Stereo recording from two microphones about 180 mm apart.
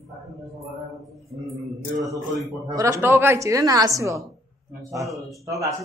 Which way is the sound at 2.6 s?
20° right (ahead or behind).